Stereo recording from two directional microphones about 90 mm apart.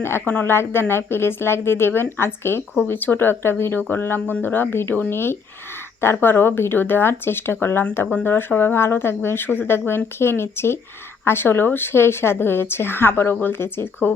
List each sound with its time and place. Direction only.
0.0 s speech: 20° left (ahead or behind)